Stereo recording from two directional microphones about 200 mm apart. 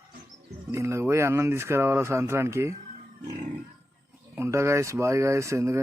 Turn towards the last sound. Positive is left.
turn(degrees=-15)  # may be behind; listen again after turning